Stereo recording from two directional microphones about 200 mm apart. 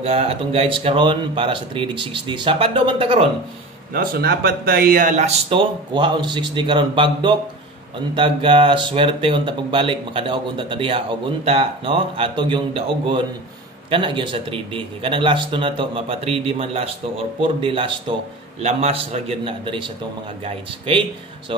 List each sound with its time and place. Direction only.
0.0 s speech: 30° right (ahead or behind)
3.9 s speech: 50° right (ahead or behind); by 21.0 s 25° right (ahead or behind)